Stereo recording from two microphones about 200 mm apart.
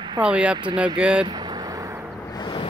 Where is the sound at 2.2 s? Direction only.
20° left (ahead or behind).